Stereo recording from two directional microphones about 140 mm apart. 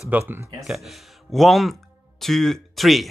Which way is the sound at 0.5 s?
Centre (ahead or behind).